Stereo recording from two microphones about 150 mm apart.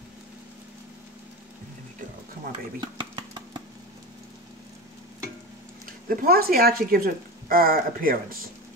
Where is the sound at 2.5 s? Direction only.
30° right (ahead or behind).